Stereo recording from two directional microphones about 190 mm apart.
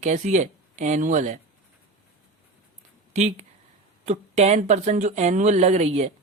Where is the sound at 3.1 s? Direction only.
35° right (ahead or behind).